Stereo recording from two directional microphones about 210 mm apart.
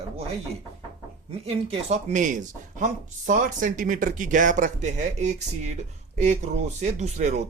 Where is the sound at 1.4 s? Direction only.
30° right (ahead or behind).